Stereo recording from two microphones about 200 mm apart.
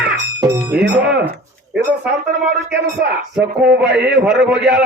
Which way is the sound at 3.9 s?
60° right (ahead or behind).